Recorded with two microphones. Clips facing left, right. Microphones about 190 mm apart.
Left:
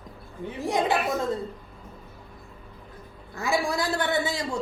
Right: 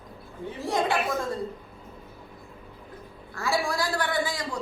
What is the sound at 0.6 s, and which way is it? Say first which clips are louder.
Speech: left 1 dB; 15° left (ahead or behind).